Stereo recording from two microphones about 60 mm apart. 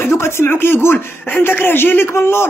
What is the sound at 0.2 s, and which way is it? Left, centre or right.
Speech, left.